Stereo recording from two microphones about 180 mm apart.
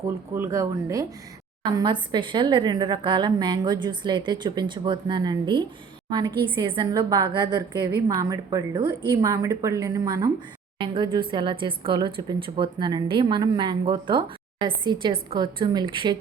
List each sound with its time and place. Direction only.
0.3 s a woman's voice: 15° right (ahead or behind)